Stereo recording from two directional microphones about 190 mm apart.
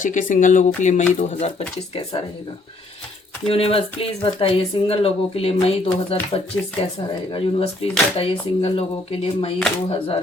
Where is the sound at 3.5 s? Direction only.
30° left (ahead or behind).